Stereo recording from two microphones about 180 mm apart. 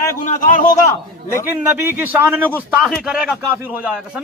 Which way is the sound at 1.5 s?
10° right (ahead or behind).